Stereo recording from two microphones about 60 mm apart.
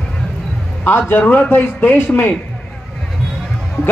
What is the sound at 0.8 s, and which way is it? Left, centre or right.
A man's voice, left.